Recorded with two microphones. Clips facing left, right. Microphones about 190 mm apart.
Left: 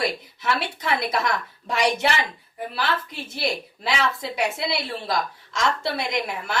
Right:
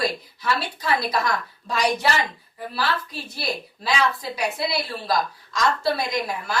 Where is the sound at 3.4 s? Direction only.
25° left (ahead or behind).